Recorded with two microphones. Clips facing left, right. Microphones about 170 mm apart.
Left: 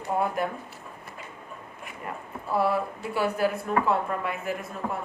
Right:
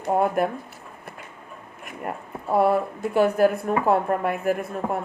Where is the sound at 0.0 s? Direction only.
55° right (ahead or behind).